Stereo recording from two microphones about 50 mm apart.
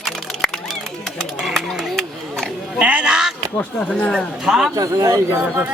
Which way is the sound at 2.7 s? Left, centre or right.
Right.